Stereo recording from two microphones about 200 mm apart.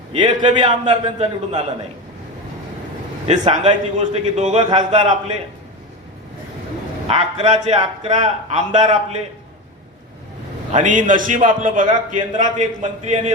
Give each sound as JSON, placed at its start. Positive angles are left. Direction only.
{"t": 0.1, "sound": "a man's voice", "side_deg": -25}
{"t": 3.2, "sound": "a man's voice", "side_deg": -35}
{"t": 7.1, "sound": "a man's voice", "side_deg": -35}
{"t": 10.7, "sound": "a man's voice", "side_deg": -40}